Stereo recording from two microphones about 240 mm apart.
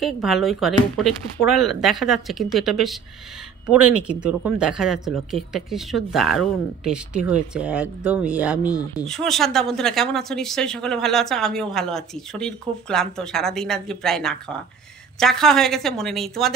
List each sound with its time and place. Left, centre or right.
0.0 s speech: centre
3.8 s speech: right
4.2 s speech: centre